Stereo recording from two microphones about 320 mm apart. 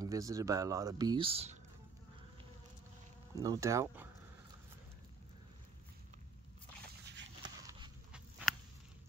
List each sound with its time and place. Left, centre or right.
0.0 s speech: centre
3.3 s speech: centre